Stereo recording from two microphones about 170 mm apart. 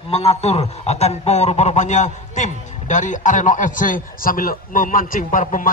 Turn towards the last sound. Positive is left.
turn(degrees=50)  # may be behind; listen again after turning